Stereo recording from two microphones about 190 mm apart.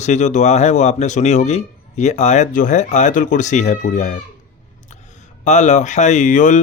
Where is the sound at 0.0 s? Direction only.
40° left (ahead or behind).